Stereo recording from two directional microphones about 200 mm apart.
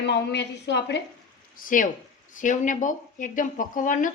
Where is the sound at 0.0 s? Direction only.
55° left (ahead or behind).